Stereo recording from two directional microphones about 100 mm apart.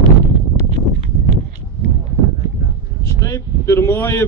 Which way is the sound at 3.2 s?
30° left (ahead or behind).